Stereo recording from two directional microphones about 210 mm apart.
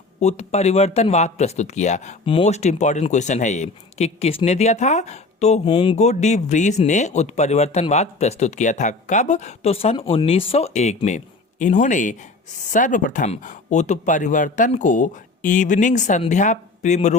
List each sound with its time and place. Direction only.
0.2 s speech: 30° left (ahead or behind)